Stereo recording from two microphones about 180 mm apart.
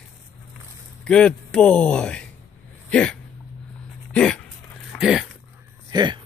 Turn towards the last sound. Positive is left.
turn(degrees=-25)  # may be behind; listen again after turning